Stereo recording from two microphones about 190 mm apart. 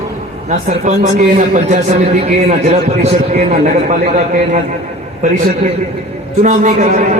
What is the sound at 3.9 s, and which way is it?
Speech, 40° right (ahead or behind).